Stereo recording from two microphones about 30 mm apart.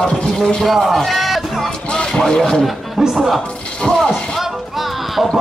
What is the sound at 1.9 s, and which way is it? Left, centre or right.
Speech, left.